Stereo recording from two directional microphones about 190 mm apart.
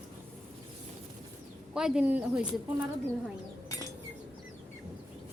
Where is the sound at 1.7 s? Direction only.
5° right (ahead or behind).